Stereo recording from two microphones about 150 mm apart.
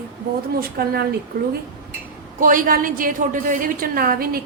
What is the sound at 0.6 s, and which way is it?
Speech, 90° right.